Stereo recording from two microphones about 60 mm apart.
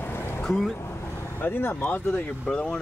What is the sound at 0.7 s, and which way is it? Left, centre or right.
Vehicle, left.